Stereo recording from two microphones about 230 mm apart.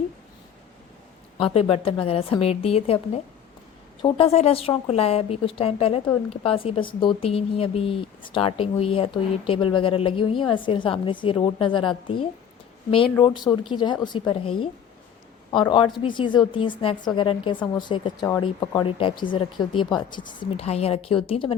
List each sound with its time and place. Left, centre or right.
1.4 s a woman's voice: left
4.0 s a woman's voice: left
15.5 s a woman's voice: left